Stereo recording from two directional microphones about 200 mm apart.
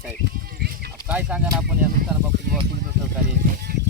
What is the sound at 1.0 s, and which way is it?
Speech, 5° right (ahead or behind).